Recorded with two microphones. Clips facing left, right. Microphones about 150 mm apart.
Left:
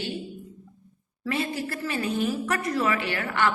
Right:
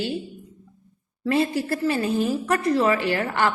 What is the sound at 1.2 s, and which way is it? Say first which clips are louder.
A woman's voice: right 7 dB; 35° right (ahead or behind).